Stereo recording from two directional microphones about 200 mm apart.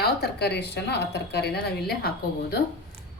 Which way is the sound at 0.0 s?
55° left (ahead or behind).